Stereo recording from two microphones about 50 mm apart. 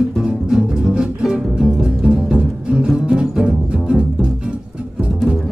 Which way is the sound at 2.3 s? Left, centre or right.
Centre.